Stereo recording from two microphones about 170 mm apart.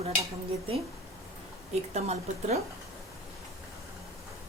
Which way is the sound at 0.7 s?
35° right (ahead or behind).